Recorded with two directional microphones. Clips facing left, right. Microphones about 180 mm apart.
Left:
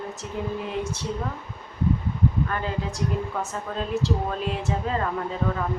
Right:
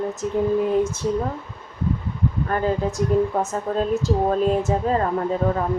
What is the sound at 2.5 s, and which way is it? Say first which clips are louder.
Speech: right 7 dB; 40° right (ahead or behind).